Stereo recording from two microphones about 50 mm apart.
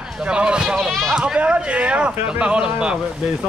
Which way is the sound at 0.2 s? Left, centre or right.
Right.